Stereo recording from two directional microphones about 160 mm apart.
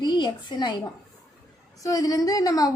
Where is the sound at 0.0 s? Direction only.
25° left (ahead or behind).